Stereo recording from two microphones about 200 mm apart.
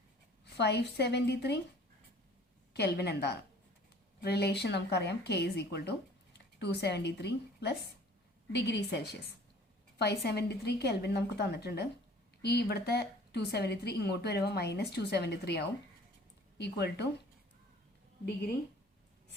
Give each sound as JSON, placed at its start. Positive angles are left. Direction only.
{"t": 0.5, "sound": "a woman's voice", "side_deg": 55}
{"t": 2.7, "sound": "a woman's voice", "side_deg": 55}